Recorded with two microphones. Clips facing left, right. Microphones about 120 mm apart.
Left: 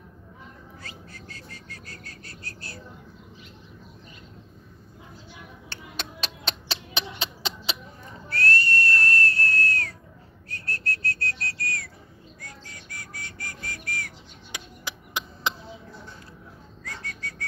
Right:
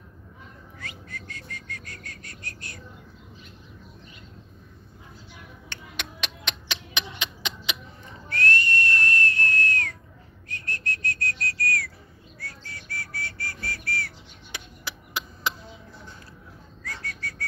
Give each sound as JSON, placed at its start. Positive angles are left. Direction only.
{"t": 0.7, "sound": "bird", "side_deg": 35}
{"t": 5.7, "sound": "a sound", "side_deg": 35}
{"t": 8.3, "sound": "whistle", "side_deg": 35}
{"t": 10.5, "sound": "whistling", "side_deg": 40}
{"t": 12.4, "sound": "whistle", "side_deg": 15}
{"t": 16.8, "sound": "whistling", "side_deg": 20}